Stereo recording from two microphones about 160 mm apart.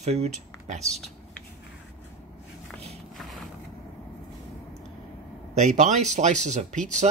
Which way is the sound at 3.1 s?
Centre (ahead or behind).